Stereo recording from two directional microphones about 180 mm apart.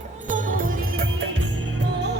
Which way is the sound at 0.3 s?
50° right (ahead or behind).